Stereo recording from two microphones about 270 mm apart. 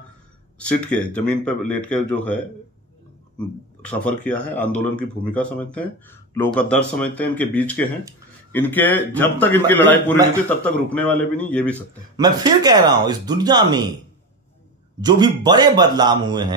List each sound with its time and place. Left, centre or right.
0.6 s speech: centre
3.3 s a man's voice: centre
12.2 s speech: centre
15.0 s speech: centre